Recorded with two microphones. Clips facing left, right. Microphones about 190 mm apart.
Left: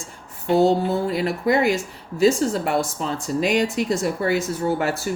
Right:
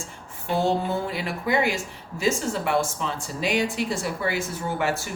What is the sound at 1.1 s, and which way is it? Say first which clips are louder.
Speech: left 5 dB; 40° left (ahead or behind).